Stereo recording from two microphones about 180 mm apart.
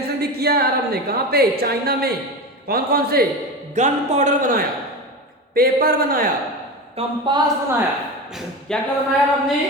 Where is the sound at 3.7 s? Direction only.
40° right (ahead or behind).